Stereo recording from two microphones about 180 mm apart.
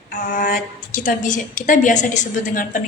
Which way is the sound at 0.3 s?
50° left (ahead or behind).